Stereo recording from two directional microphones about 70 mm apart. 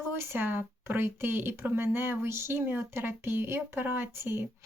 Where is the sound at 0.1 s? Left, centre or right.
Right.